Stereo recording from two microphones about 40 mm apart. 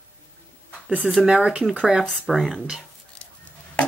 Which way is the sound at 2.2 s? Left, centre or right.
Centre.